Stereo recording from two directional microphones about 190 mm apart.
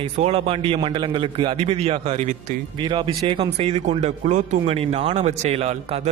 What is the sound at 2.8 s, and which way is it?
A man's voice, 25° right (ahead or behind).